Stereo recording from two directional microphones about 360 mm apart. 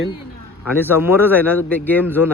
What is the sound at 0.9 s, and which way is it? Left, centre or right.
A man's voice, centre.